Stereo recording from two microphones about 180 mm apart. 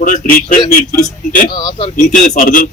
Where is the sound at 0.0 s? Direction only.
50° left (ahead or behind).